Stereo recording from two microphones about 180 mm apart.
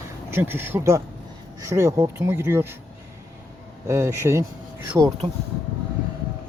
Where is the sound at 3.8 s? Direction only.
15° right (ahead or behind).